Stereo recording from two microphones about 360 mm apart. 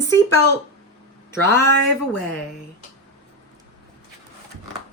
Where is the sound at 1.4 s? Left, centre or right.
Centre.